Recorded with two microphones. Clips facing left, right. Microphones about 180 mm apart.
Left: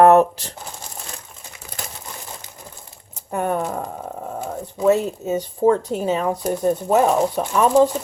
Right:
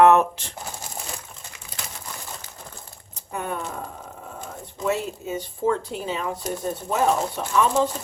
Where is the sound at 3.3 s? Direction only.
50° left (ahead or behind).